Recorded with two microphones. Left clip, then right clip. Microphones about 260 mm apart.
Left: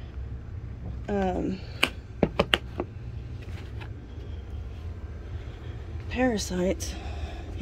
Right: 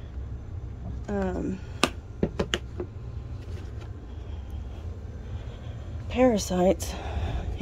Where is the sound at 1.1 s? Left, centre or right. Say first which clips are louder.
Left 2 dB; centre.